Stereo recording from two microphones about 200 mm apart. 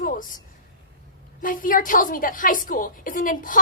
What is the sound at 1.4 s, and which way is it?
A woman's voice, 45° left (ahead or behind).